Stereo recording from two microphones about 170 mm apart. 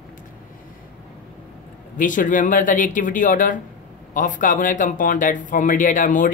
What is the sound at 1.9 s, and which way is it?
A woman's voice, 50° left (ahead or behind).